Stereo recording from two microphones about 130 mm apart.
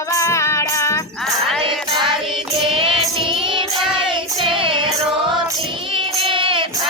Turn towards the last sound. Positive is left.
turn(degrees=-40)  # may be behind; listen again after turning